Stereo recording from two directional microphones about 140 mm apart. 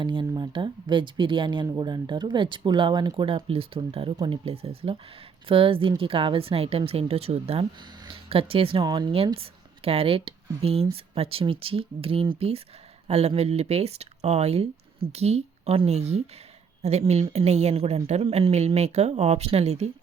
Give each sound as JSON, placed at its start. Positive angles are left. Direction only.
{"t": 0.0, "sound": "speech", "side_deg": -35}
{"t": 8.8, "sound": "a woman's voice", "side_deg": -30}